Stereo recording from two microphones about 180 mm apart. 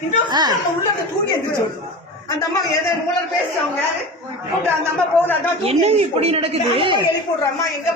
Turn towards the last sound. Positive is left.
turn(degrees=-30)  # may be behind; listen again after turning